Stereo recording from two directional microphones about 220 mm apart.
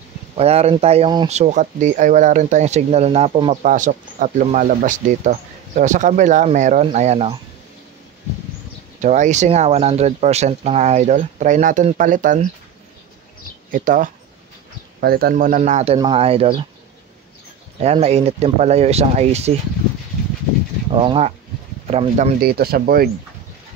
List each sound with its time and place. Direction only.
0.4 s speech: 30° right (ahead or behind)
9.0 s speech: 35° right (ahead or behind)
13.7 s speech: 40° right (ahead or behind)
17.7 s speech: 30° right (ahead or behind)
20.9 s speech: 25° right (ahead or behind)
22.4 s speech: 45° right (ahead or behind)